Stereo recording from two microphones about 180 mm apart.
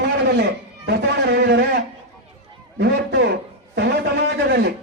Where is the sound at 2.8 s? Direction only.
65° right (ahead or behind).